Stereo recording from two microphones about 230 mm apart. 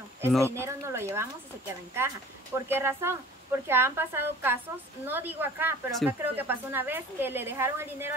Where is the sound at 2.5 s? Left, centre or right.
Centre.